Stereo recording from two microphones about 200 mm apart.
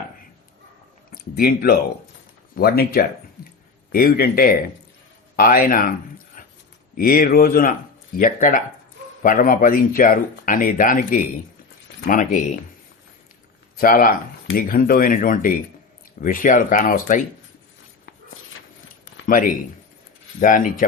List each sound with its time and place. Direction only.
1.1 s speech: 50° left (ahead or behind)
6.4 s a sound: 45° left (ahead or behind)
6.9 s speech: 45° left (ahead or behind)
13.7 s speech: 45° left (ahead or behind)
19.2 s speech: 40° left (ahead or behind)